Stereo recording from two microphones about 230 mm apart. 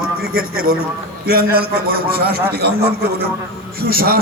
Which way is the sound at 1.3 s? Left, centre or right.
Right.